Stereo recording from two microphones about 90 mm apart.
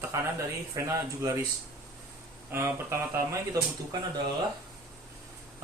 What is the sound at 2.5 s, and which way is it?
Speech, 30° right (ahead or behind).